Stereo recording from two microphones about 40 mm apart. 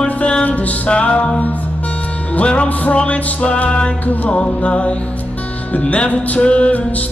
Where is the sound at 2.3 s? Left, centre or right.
Left.